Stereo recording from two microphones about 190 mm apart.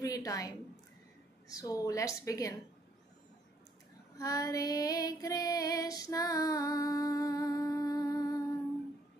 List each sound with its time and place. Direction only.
0.0 s a woman's voice: 20° left (ahead or behind)
4.2 s female singing: 20° left (ahead or behind)